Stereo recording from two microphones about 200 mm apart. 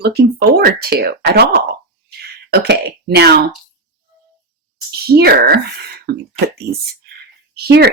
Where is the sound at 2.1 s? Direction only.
55° right (ahead or behind).